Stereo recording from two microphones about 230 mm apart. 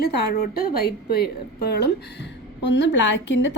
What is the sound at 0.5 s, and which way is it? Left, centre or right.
A woman's voice, left.